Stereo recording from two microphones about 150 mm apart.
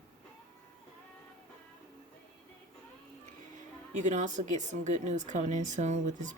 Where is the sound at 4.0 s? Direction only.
55° right (ahead or behind).